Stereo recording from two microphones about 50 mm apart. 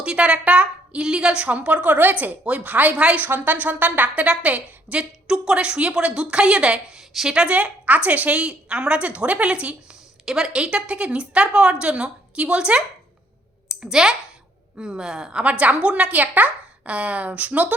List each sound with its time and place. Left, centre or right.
0.0 s a woman's voice: centre
3.2 s a woman's voice: right; by 7.0 s centre
7.1 s speech: centre
7.3 s a woman's voice: right
13.8 s a woman's voice: centre; by 17.7 s right